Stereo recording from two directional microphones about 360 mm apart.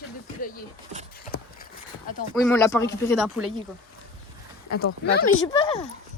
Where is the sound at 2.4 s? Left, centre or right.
Centre.